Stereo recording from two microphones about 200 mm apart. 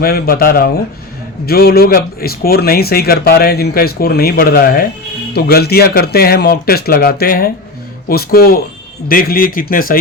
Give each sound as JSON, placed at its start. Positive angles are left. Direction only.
{"t": 0.0, "sound": "speech", "side_deg": 50}